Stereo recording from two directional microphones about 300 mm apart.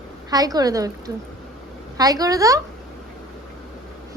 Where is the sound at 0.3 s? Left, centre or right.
Centre.